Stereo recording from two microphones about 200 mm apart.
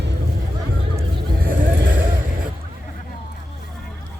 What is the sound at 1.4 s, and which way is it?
Vehicle, 45° right (ahead or behind).